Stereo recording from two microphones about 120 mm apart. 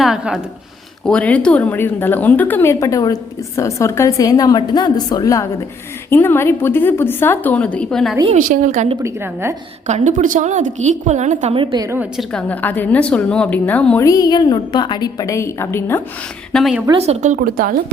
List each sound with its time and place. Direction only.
0.0 s speech: 5° right (ahead or behind)
1.0 s a woman's voice: 10° left (ahead or behind); by 5.5 s 30° left (ahead or behind)
6.1 s a woman's voice: 20° left (ahead or behind)
8.3 s a woman's voice: 90° right
9.0 s a woman's voice: 20° right (ahead or behind)
9.8 s a woman's voice: 85° right
11.5 s a woman's voice: 40° right (ahead or behind)
12.3 s a woman's voice: 10° left (ahead or behind)
14.0 s a woman's voice: 30° left (ahead or behind)
16.5 s speech: 5° left (ahead or behind)
17.0 s speech: 75° right (ahead or behind)